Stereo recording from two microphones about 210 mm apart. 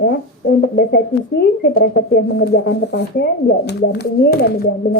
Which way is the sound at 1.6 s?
50° left (ahead or behind).